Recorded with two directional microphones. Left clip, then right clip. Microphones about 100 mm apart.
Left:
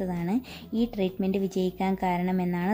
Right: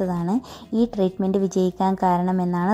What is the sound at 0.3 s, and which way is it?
A woman's voice, 35° right (ahead or behind).